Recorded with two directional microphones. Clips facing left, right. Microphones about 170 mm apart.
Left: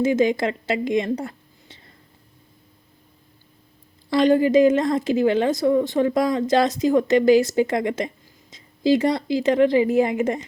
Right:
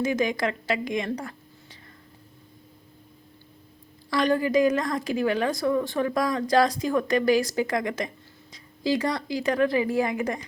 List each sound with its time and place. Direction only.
0.0 s speech: 25° left (ahead or behind)
4.1 s a woman's voice: 25° left (ahead or behind)